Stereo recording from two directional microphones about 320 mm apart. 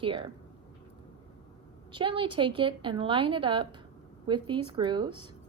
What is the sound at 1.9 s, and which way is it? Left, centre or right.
A woman's voice, centre.